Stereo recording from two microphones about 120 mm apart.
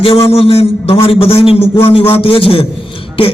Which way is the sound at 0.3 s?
55° left (ahead or behind).